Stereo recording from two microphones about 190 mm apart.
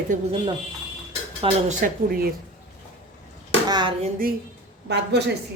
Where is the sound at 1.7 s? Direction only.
45° right (ahead or behind).